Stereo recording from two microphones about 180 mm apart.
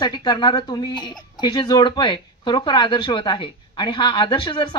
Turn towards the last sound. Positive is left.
turn(degrees=30)  # may be behind; listen again after turning